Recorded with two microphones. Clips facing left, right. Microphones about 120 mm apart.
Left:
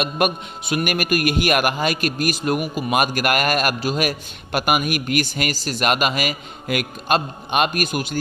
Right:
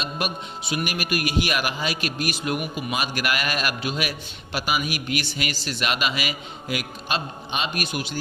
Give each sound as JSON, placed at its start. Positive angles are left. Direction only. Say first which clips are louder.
{"t": 0.0, "sound": "a man's voice", "louder": "left 8 dB", "side_deg": 55}
{"t": 4.5, "sound": "a man's voice", "louder": "left 6 dB", "side_deg": 55}